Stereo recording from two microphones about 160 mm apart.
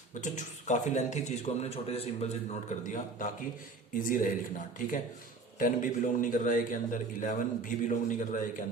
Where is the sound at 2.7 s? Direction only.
55° left (ahead or behind).